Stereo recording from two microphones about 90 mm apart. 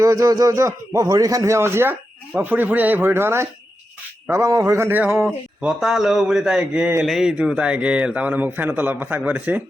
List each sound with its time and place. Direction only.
0.0 s a man's voice: 35° right (ahead or behind)
5.5 s a man's voice: 5° right (ahead or behind)